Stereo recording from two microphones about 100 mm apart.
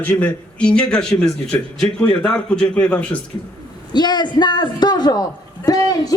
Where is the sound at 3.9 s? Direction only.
45° left (ahead or behind).